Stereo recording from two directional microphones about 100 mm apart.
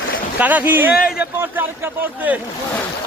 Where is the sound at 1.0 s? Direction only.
10° right (ahead or behind).